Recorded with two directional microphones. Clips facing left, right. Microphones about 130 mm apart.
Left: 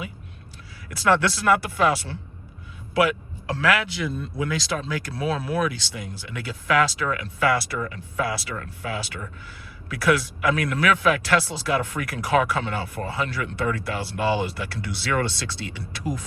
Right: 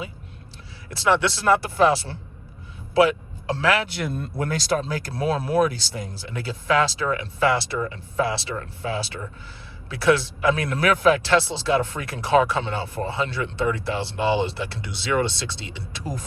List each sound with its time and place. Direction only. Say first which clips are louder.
0.9 s speech: even; 30° right (ahead or behind)
3.8 s speech: even; 55° right (ahead or behind); by 16.0 s 25° right (ahead or behind)